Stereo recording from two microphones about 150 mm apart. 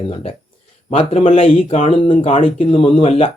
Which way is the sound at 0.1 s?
40° left (ahead or behind).